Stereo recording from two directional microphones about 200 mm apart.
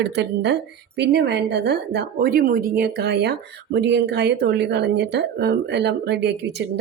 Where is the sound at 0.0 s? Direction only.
55° right (ahead or behind).